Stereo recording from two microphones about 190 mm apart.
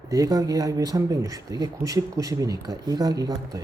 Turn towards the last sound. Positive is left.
turn(degrees=-20)  # may be behind; listen again after turning